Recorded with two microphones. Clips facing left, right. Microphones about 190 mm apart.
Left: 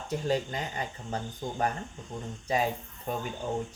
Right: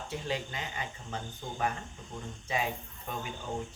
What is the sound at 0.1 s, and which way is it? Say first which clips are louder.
Speech: left 7 dB; 40° left (ahead or behind).